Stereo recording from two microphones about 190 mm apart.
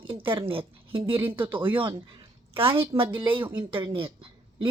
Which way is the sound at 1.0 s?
10° right (ahead or behind).